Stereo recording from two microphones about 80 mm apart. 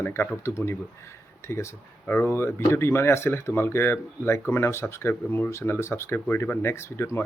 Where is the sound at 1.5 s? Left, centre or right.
Left.